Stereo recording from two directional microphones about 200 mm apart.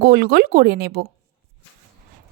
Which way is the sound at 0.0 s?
50° right (ahead or behind).